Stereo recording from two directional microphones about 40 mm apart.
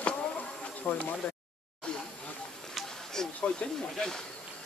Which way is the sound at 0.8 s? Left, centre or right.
Left.